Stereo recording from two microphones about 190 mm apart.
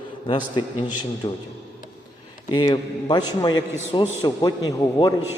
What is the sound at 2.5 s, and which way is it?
A man's voice, 20° left (ahead or behind).